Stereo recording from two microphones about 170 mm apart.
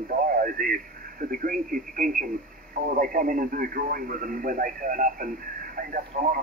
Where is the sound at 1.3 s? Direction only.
55° right (ahead or behind).